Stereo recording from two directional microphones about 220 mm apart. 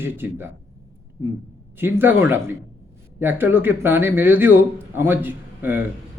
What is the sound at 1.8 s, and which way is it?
A man's voice, 10° right (ahead or behind).